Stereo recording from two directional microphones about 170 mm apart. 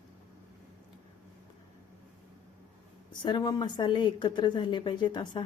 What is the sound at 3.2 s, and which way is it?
A woman's voice, 25° left (ahead or behind).